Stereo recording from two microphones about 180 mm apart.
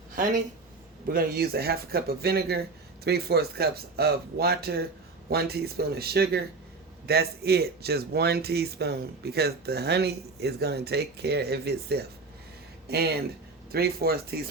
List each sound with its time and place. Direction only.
1.0 s speech: 55° right (ahead or behind)